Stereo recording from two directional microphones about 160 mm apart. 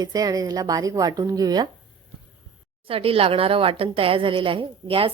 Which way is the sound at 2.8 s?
35° right (ahead or behind).